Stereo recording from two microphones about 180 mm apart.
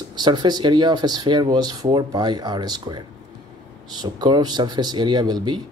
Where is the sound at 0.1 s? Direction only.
25° right (ahead or behind).